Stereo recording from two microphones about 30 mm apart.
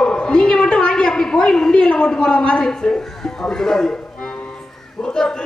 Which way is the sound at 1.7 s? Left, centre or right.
Left.